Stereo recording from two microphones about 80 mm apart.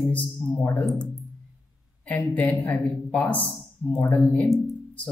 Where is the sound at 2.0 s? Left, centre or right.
Left.